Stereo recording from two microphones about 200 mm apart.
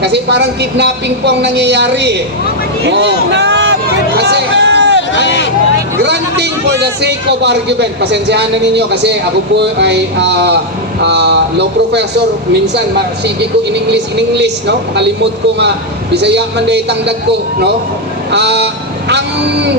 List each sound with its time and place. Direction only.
0.0 s a man's voice: 55° right (ahead or behind)
4.2 s a sound: 60° right (ahead or behind)
5.2 s speech: 65° left (ahead or behind)
6.0 s a man's voice: 55° right (ahead or behind)
13.9 s a man's voice: 60° right (ahead or behind)
18.3 s speech: 60° right (ahead or behind)